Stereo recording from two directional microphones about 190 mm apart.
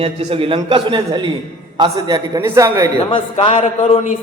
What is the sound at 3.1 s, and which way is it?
Speech, 25° left (ahead or behind).